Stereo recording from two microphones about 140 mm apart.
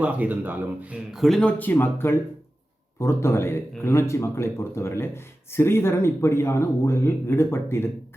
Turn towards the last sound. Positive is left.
turn(degrees=20)  # may be behind; listen again after turning